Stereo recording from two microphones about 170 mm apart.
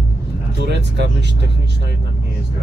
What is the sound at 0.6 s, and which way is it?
Speech, 85° right.